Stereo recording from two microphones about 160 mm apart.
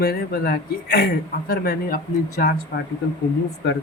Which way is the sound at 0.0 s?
70° left (ahead or behind).